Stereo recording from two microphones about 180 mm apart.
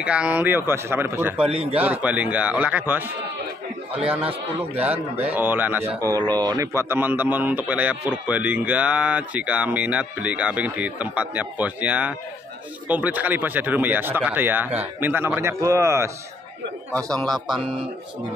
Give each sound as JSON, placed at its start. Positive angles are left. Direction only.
{"t": 0.0, "sound": "a man's voice", "side_deg": -5}
{"t": 1.5, "sound": "a man's voice", "side_deg": -35}
{"t": 1.8, "sound": "a man's voice", "side_deg": -10}
{"t": 4.1, "sound": "a man's voice", "side_deg": -10}
{"t": 16.9, "sound": "speech", "side_deg": 5}